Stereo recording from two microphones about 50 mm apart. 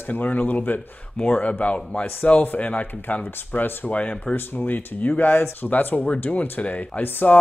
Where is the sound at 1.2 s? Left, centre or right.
Left.